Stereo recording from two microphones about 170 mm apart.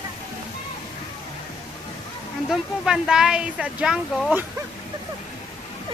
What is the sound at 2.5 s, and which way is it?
Speech, 5° right (ahead or behind).